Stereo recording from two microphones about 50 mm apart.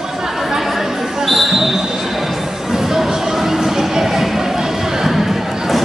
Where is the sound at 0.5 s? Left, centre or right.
Centre.